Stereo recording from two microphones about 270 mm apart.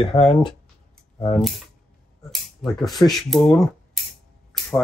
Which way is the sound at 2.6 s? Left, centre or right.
Centre.